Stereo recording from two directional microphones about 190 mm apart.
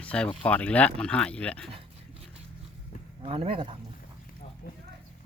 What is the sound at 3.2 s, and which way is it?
Speech, 30° right (ahead or behind).